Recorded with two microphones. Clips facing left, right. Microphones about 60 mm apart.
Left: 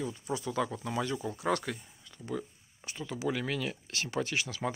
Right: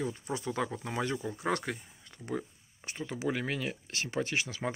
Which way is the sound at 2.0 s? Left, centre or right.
Right.